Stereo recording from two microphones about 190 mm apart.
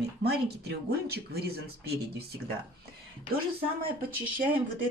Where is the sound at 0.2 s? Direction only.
60° right (ahead or behind).